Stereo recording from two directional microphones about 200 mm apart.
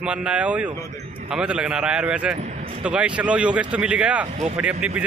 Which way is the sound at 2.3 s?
35° right (ahead or behind).